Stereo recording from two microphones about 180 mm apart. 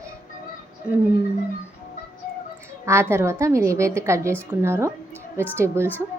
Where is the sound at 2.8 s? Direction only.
15° right (ahead or behind).